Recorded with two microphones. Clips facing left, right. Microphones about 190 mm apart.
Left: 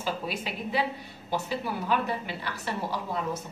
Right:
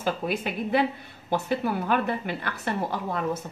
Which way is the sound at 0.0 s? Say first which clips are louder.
Right 5 dB; 55° right (ahead or behind).